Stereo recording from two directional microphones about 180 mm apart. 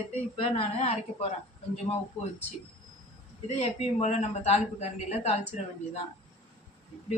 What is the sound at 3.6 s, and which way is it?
A woman's voice, 40° left (ahead or behind).